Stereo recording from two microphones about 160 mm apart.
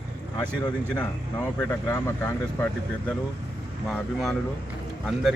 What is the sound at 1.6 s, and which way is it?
Speech, 15° left (ahead or behind).